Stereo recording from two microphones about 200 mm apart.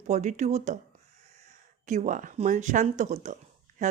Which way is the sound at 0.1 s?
35° right (ahead or behind).